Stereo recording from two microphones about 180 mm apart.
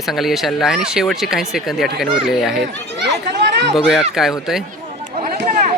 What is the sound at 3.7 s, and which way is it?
Speech, centre (ahead or behind).